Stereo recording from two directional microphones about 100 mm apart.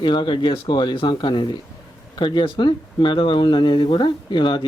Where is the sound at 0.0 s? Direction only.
50° left (ahead or behind).